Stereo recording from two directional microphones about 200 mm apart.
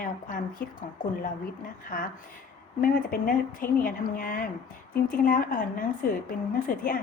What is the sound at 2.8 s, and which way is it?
A woman's voice, 45° left (ahead or behind).